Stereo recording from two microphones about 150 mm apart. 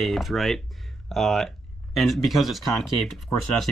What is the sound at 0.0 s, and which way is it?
Speech, centre (ahead or behind).